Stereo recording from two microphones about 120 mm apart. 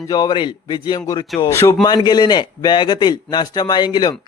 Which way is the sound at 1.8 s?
35° left (ahead or behind).